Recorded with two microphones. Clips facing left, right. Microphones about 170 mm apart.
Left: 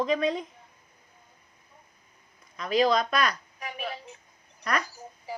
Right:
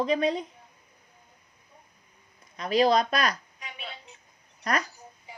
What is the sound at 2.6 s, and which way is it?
Speech, 35° right (ahead or behind).